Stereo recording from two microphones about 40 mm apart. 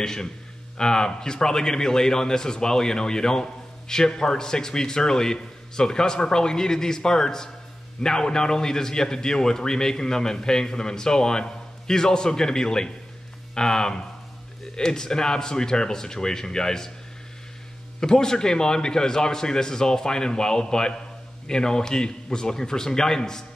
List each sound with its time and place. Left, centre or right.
0.0 s a man's voice: centre
18.0 s a man's voice: centre